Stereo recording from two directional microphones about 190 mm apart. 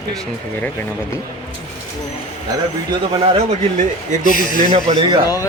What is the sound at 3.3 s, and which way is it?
Speech, 40° right (ahead or behind).